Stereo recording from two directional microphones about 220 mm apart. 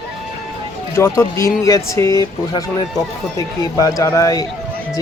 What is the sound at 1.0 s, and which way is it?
Speech, 15° left (ahead or behind).